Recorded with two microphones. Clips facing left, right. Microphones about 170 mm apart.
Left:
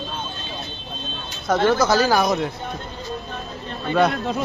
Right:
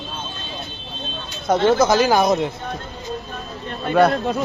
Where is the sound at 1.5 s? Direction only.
20° right (ahead or behind).